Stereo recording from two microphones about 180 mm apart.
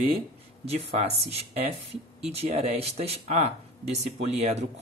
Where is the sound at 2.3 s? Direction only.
35° right (ahead or behind).